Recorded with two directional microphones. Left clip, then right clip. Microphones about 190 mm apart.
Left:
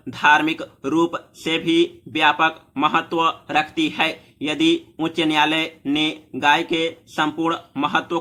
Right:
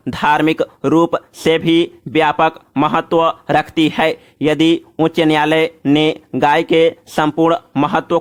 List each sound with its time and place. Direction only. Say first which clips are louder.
0.1 s speech: right 2 dB; 50° right (ahead or behind)